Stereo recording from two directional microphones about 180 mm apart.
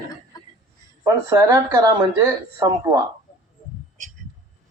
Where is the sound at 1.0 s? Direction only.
20° right (ahead or behind).